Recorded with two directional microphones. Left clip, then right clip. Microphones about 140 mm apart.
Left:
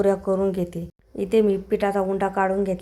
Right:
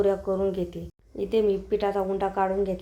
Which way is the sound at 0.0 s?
40° left (ahead or behind).